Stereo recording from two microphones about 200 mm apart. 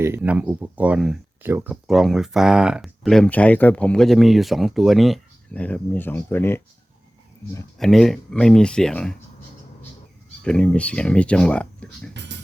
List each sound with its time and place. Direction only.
0.0 s speech: 10° right (ahead or behind); by 6.6 s 10° left (ahead or behind)
7.8 s speech: centre (ahead or behind)
10.4 s speech: 5° left (ahead or behind)
12.1 s speech: 60° right (ahead or behind)